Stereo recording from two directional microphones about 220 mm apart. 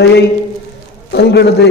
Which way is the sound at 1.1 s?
50° left (ahead or behind).